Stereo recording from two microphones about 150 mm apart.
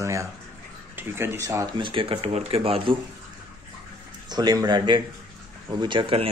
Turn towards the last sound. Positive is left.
turn(degrees=-40)  # may be behind; listen again after turning